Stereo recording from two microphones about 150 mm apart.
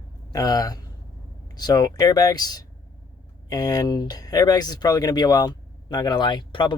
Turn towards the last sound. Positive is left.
turn(degrees=30)  # may be behind; listen again after turning